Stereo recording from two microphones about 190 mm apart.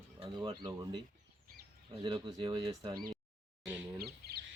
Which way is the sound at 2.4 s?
25° right (ahead or behind).